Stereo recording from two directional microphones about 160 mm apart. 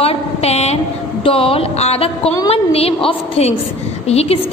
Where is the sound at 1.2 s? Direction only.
35° left (ahead or behind).